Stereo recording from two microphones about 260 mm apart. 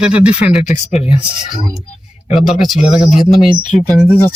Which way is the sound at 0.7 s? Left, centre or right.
Left.